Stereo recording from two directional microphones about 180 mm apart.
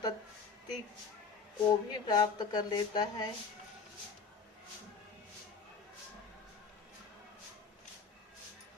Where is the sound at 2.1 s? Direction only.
25° left (ahead or behind).